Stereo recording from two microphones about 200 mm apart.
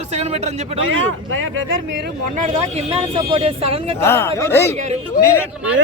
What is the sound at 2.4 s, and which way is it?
Speech, 35° right (ahead or behind).